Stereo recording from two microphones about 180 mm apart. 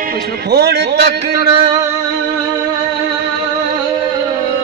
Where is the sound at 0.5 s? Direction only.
65° right (ahead or behind).